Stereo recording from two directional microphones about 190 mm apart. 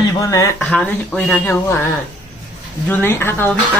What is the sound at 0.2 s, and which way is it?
Speech, 15° left (ahead or behind).